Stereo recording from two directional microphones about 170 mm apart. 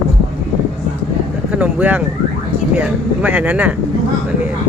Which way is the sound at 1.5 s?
10° right (ahead or behind).